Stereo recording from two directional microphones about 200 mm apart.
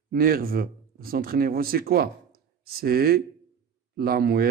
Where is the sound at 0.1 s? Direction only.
45° right (ahead or behind).